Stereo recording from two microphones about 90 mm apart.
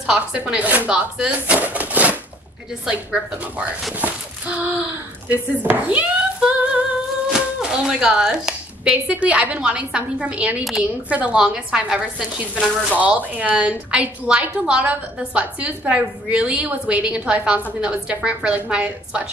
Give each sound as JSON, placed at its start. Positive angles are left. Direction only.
{"t": 0.0, "sound": "a woman's voice", "side_deg": -10}
{"t": 4.0, "sound": "a sound", "side_deg": -20}
{"t": 5.3, "sound": "a woman's voice", "side_deg": -15}